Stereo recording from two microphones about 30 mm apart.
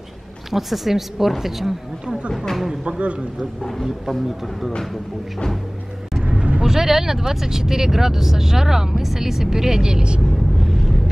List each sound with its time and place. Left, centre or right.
0.5 s speech: centre
2.8 s a man's voice: right
4.1 s speech: centre
6.6 s speech: centre